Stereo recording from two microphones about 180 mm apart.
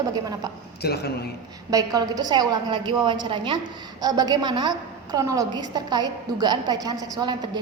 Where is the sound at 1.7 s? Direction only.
20° right (ahead or behind).